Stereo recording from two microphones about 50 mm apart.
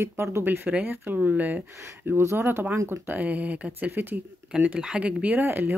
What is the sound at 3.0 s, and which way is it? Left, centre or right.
Speech, right.